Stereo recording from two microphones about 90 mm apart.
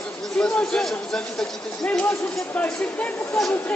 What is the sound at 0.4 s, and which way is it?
Speech, 5° left (ahead or behind).